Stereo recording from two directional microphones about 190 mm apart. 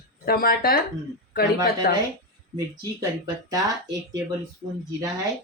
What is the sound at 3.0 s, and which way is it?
Speech, 20° right (ahead or behind).